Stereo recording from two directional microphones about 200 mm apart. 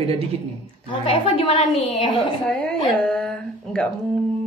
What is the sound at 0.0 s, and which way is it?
Speech, 30° right (ahead or behind).